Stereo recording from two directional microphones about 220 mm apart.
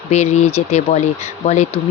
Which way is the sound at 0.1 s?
30° left (ahead or behind).